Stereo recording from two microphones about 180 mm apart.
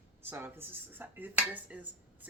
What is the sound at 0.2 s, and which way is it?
Speech, 15° right (ahead or behind).